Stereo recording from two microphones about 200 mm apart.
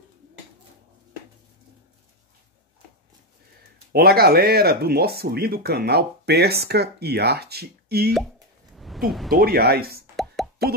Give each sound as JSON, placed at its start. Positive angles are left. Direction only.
{"t": 3.9, "sound": "speech", "side_deg": -50}
{"t": 8.7, "sound": "a sound", "side_deg": 0}
{"t": 9.3, "sound": "speech", "side_deg": -50}
{"t": 10.1, "sound": "plop", "side_deg": 0}